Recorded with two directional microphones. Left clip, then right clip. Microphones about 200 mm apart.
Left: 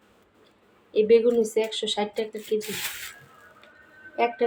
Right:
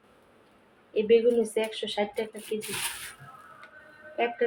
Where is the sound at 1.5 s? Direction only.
25° left (ahead or behind).